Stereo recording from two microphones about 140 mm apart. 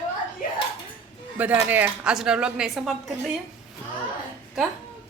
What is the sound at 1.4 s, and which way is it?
A woman's voice, 10° right (ahead or behind).